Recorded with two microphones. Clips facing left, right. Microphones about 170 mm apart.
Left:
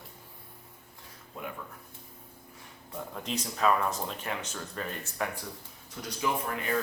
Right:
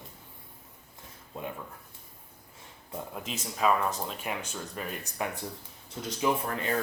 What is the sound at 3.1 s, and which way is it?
Speech, 5° right (ahead or behind).